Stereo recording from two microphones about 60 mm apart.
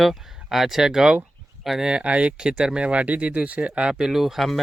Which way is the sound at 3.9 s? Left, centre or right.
Centre.